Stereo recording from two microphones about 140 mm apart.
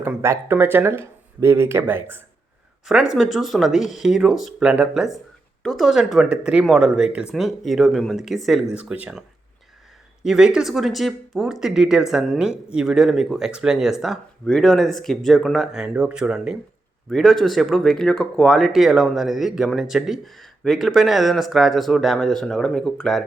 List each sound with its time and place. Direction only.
0.2 s speech: 20° right (ahead or behind)
2.8 s speech: 5° right (ahead or behind)
10.2 s speech: 5° right (ahead or behind)